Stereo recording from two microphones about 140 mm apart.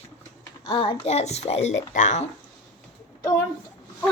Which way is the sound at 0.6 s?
35° left (ahead or behind).